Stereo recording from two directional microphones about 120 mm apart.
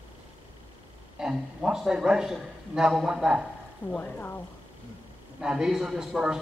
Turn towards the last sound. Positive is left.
turn(degrees=-5)  # may be behind; listen again after turning